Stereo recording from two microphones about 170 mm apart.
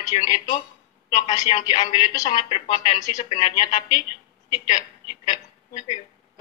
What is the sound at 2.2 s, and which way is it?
A woman's voice, 35° left (ahead or behind).